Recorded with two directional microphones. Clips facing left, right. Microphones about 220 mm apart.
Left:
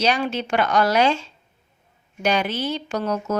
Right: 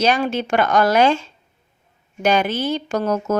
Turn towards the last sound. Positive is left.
turn(degrees=-50)  # may be behind; listen again after turning